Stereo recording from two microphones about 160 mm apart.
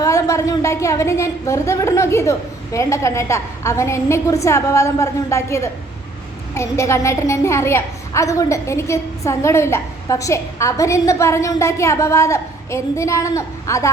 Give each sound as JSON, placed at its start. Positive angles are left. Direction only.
{"t": 0.0, "sound": "a woman's voice", "side_deg": 20}